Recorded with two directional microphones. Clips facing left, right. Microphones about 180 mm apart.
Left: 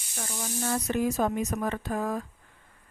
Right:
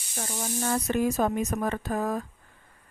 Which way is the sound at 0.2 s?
45° right (ahead or behind).